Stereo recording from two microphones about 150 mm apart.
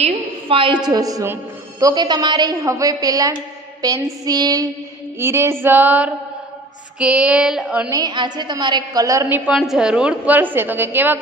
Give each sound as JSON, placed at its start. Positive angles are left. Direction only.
{"t": 0.0, "sound": "a woman's voice", "side_deg": -35}
{"t": 7.9, "sound": "a woman's voice", "side_deg": -30}
{"t": 9.5, "sound": "a woman's voice", "side_deg": -5}